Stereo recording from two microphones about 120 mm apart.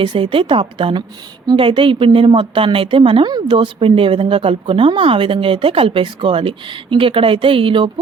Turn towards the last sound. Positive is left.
turn(degrees=-45)  # may be behind; listen again after turning